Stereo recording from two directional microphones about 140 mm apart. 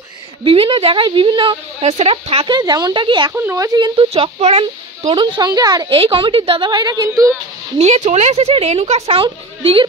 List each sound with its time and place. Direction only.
0.4 s a woman's voice: 40° right (ahead or behind)
1.8 s speech: 45° right (ahead or behind)
2.4 s a woman's voice: 30° right (ahead or behind)
3.3 s speech: 20° right (ahead or behind)
4.1 s speech: 45° right (ahead or behind)
5.0 s a woman's voice: 35° right (ahead or behind)
7.8 s speech: 50° right (ahead or behind)